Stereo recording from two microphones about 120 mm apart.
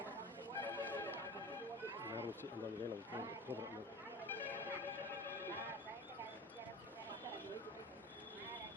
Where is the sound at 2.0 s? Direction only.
20° right (ahead or behind).